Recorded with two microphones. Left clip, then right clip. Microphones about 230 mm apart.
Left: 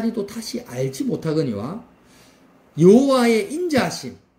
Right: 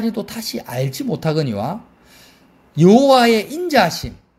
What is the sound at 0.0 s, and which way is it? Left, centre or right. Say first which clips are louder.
A man's voice: right 2 dB; right.